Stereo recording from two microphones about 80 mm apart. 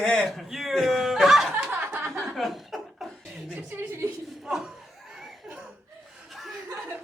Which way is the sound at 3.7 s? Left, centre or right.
Right.